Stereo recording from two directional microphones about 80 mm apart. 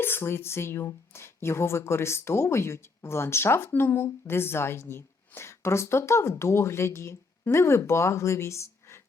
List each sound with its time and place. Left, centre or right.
0.0 s speech: left